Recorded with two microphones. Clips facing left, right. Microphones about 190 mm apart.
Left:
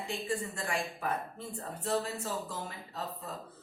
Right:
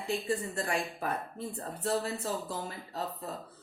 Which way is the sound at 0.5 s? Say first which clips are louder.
Right 3 dB; 40° right (ahead or behind).